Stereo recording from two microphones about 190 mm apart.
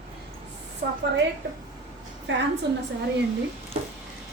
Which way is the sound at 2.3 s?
75° right (ahead or behind).